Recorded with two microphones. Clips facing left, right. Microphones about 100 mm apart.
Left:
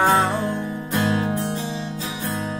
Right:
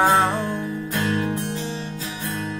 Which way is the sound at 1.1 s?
30° left (ahead or behind).